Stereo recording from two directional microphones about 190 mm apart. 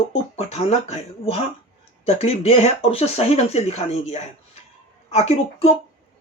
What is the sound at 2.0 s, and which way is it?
Speech, 30° left (ahead or behind).